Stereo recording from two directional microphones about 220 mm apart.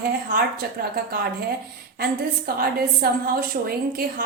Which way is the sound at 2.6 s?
45° right (ahead or behind).